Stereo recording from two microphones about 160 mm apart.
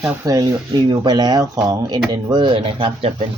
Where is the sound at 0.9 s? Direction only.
25° right (ahead or behind).